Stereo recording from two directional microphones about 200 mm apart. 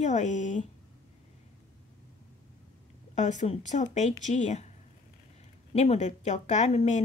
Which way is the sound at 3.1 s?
35° left (ahead or behind).